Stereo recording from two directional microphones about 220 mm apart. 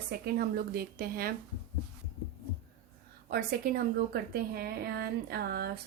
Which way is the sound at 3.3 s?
45° right (ahead or behind).